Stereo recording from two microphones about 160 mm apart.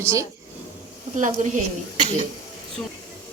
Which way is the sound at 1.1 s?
50° right (ahead or behind).